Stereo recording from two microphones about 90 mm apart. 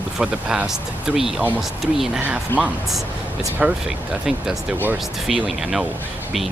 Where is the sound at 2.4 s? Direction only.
15° right (ahead or behind).